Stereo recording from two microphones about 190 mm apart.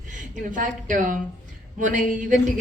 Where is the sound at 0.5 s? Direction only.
40° right (ahead or behind).